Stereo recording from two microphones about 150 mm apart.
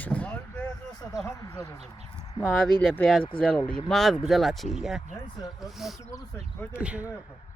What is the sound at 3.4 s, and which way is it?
Speech, 10° left (ahead or behind).